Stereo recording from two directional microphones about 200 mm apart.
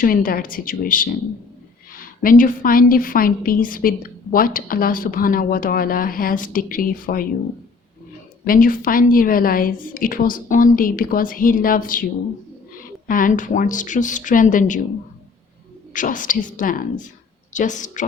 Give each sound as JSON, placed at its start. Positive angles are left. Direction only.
{"t": 0.0, "sound": "a woman's voice", "side_deg": 45}
{"t": 8.4, "sound": "a woman's voice", "side_deg": 45}
{"t": 15.9, "sound": "speech", "side_deg": 40}